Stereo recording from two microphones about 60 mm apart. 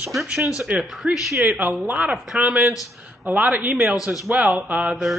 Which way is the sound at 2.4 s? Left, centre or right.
Right.